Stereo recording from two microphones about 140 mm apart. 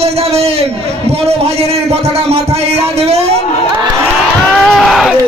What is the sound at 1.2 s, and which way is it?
Music, 45° right (ahead or behind).